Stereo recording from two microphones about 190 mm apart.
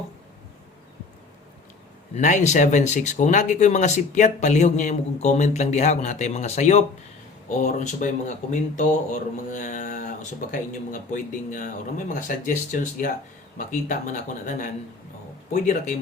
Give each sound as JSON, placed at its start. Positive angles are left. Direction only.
{"t": 2.1, "sound": "speech", "side_deg": 40}